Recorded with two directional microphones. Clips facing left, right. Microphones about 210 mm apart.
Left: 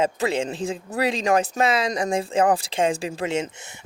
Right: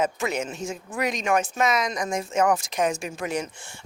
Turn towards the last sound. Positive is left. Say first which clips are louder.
# left 3 dB
turn(degrees=25)  # may be behind; listen again after turning